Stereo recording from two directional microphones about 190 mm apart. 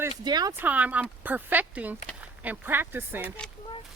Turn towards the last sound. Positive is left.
turn(degrees=-10)  # may be behind; listen again after turning